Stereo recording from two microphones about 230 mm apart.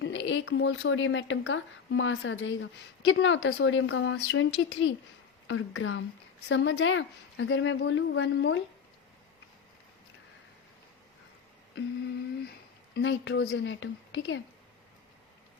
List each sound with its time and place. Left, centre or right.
0.0 s a woman's voice: left
12.9 s a woman's voice: left